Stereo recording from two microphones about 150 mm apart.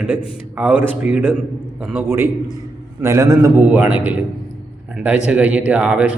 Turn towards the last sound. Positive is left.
turn(degrees=-10)  # may be behind; listen again after turning